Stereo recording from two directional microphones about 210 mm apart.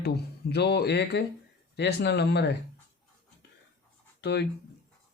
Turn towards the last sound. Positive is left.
turn(degrees=55)  # may be behind; listen again after turning